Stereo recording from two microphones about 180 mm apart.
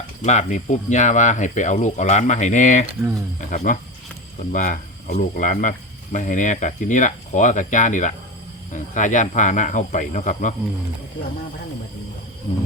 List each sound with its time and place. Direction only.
0.2 s speech: 40° left (ahead or behind)